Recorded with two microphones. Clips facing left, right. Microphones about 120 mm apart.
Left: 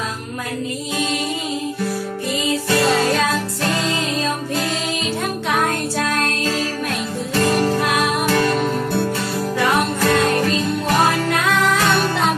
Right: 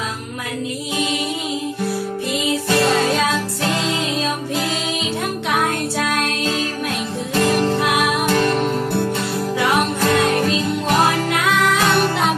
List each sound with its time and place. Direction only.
2.6 s music: 15° right (ahead or behind)
5.5 s music: 10° right (ahead or behind)
7.4 s music: centre (ahead or behind)
10.8 s music: 15° right (ahead or behind)